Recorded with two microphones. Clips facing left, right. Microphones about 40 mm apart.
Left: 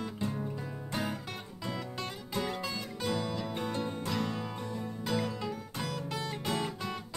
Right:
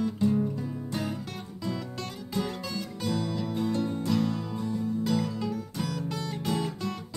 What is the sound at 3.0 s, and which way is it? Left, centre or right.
Music, centre.